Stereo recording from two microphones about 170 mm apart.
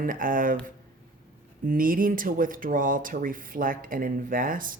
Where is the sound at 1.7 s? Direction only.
55° right (ahead or behind).